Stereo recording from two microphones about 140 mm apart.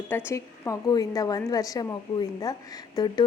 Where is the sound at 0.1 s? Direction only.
15° left (ahead or behind).